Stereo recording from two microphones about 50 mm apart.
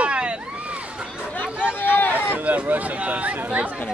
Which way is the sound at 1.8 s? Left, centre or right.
Left.